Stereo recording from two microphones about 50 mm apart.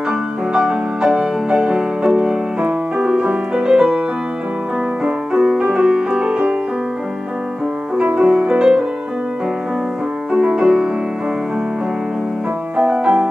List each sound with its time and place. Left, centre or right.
0.5 s music: centre
5.0 s music: centre
8.0 s music: right
10.3 s music: centre
12.7 s music: centre